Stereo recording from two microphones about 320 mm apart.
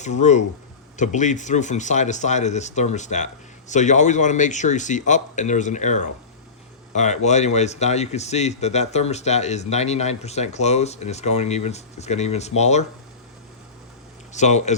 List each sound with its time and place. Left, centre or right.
0.0 s speech: left
14.3 s speech: left